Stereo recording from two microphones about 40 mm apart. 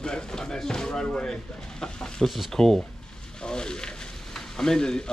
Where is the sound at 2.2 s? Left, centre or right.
Centre.